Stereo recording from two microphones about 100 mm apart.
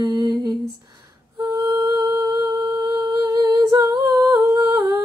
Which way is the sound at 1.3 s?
35° right (ahead or behind).